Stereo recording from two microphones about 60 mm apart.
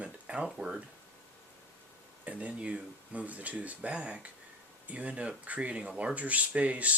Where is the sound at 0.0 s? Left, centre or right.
Centre.